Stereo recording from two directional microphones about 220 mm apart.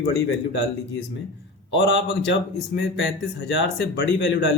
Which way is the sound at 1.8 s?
50° left (ahead or behind).